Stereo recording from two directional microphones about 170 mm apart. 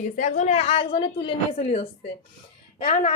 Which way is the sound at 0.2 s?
50° left (ahead or behind).